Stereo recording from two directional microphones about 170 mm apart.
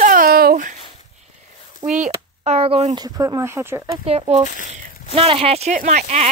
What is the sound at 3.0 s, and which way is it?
Speech, 20° right (ahead or behind).